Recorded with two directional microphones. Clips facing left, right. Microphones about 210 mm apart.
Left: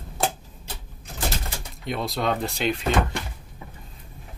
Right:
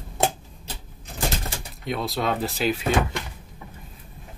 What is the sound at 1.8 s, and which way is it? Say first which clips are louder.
Speech: even; centre (ahead or behind).